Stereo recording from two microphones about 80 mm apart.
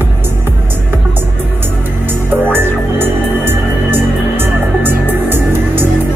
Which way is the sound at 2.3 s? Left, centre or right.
Right.